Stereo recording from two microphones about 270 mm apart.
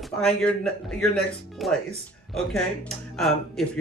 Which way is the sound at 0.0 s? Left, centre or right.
Centre.